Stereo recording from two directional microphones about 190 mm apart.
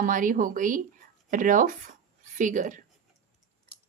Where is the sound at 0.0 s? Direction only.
45° right (ahead or behind).